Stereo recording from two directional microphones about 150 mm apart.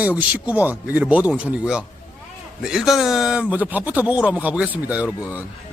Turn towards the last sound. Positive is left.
turn(degrees=-10)  # may be behind; listen again after turning